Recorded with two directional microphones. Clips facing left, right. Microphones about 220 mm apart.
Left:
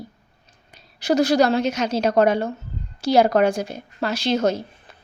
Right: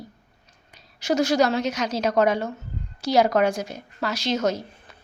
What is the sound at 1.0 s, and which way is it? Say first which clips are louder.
A woman's voice: left 3 dB; 35° left (ahead or behind).